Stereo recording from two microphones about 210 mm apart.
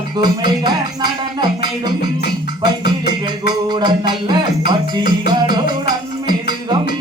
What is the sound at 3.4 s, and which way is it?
Music, 20° right (ahead or behind).